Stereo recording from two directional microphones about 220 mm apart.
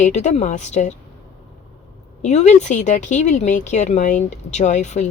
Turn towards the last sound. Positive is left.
turn(degrees=30)  # may be behind; listen again after turning